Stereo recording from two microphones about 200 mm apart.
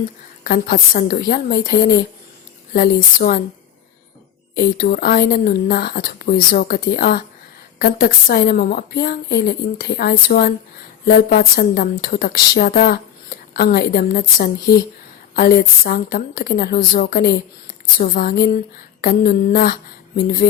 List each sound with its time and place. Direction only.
0.4 s a woman's voice: 45° left (ahead or behind)
2.7 s a woman's voice: 45° left (ahead or behind)
4.5 s a woman's voice: 50° left (ahead or behind)